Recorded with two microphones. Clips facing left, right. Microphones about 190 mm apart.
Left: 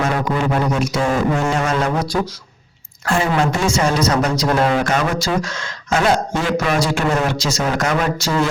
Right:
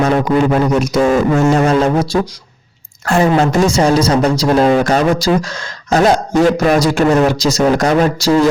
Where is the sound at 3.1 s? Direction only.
40° right (ahead or behind).